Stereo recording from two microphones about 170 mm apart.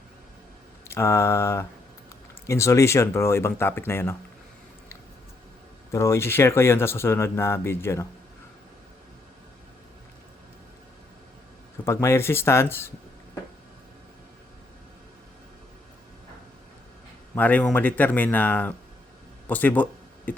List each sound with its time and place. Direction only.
0.9 s speech: 15° left (ahead or behind)
5.9 s speech: 15° left (ahead or behind)
11.9 s speech: 15° left (ahead or behind)
17.3 s speech: 10° left (ahead or behind)